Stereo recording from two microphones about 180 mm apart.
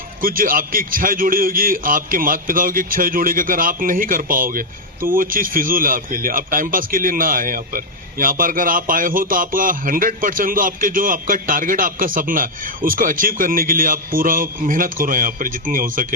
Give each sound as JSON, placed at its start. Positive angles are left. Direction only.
{"t": 0.2, "sound": "speech", "side_deg": -50}